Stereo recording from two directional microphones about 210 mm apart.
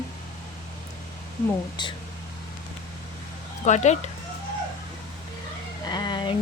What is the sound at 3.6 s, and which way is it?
Speech, 35° left (ahead or behind).